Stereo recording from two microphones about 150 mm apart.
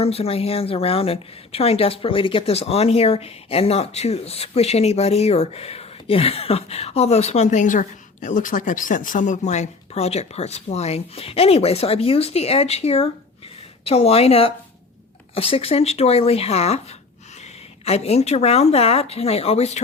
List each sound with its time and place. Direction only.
0.0 s a woman's voice: 40° left (ahead or behind)